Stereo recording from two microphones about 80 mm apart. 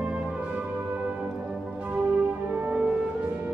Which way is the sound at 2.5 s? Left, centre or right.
Centre.